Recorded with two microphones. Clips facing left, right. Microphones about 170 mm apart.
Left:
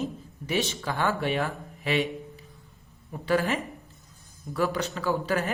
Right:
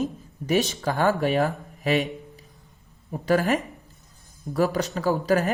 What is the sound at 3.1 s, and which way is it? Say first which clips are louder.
Speech: right 4 dB; 40° right (ahead or behind).